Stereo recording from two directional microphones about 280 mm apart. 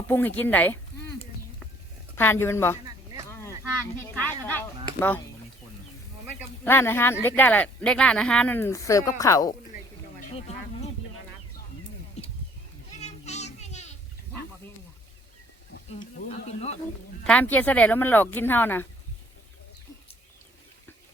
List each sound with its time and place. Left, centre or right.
0.1 s speech: centre
2.1 s speech: centre
3.9 s speech: centre
6.7 s speech: centre
10.2 s a sound: left
12.2 s wild animals: left
13.0 s child singing: left
15.9 s insect: left
17.2 s speech: centre